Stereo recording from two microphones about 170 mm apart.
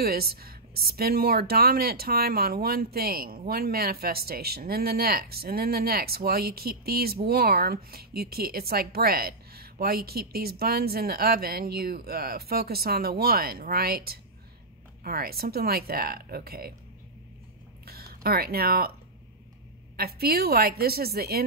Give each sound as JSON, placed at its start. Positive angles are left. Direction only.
{"t": 0.0, "sound": "speech", "side_deg": -65}
{"t": 17.8, "sound": "speech", "side_deg": -65}
{"t": 20.0, "sound": "speech", "side_deg": -65}